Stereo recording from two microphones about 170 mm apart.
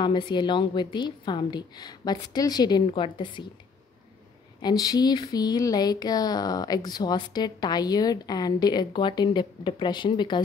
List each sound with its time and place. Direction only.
0.0 s speech: 25° left (ahead or behind)
4.6 s speech: 25° left (ahead or behind)